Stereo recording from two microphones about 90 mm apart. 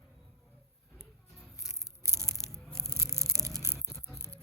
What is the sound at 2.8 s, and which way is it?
Rattle, 30° right (ahead or behind).